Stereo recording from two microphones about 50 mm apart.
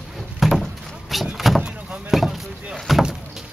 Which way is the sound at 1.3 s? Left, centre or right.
Centre.